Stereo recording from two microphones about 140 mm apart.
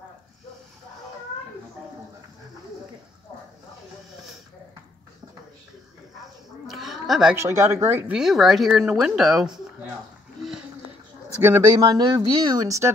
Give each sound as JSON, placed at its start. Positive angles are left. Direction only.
{"t": 6.7, "sound": "a sound", "side_deg": 0}
{"t": 7.3, "sound": "speech", "side_deg": -20}
{"t": 8.2, "sound": "speech", "side_deg": 0}
{"t": 11.4, "sound": "speech", "side_deg": -15}
{"t": 11.7, "sound": "speech", "side_deg": -25}